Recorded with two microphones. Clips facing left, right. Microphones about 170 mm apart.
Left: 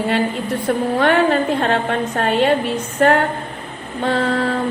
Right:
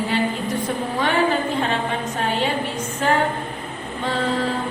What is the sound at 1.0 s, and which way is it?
A woman's voice, 60° left (ahead or behind).